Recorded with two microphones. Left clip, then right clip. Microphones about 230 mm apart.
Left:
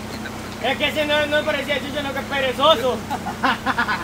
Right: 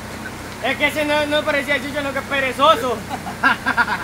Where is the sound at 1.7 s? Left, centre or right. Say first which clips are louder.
Right 3 dB; right.